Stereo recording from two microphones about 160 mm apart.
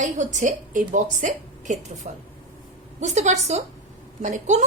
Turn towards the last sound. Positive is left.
turn(degrees=-50)  # may be behind; listen again after turning